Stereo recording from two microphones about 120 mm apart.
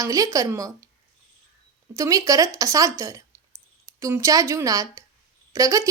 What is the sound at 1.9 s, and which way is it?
Speech, 25° right (ahead or behind).